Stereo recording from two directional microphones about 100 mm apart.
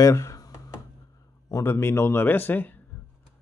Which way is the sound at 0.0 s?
30° left (ahead or behind).